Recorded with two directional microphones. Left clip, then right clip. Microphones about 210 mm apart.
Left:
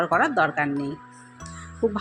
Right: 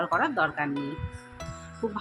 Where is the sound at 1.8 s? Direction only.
15° left (ahead or behind).